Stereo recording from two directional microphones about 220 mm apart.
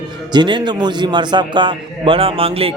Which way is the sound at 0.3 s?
20° right (ahead or behind).